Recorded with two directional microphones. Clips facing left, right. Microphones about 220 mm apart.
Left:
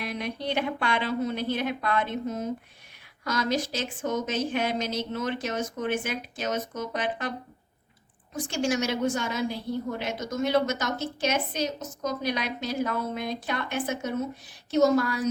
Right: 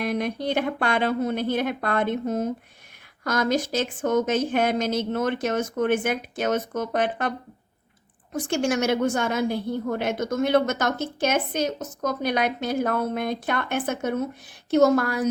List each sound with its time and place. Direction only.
0.0 s a woman's voice: 50° right (ahead or behind)